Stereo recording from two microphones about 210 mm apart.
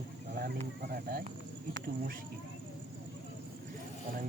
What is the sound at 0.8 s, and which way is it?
Speech, 45° right (ahead or behind).